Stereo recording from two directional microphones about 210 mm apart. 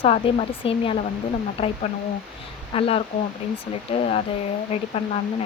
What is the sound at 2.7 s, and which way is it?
Speech, 25° left (ahead or behind).